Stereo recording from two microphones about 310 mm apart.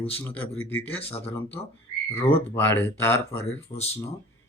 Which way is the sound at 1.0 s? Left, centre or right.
Centre.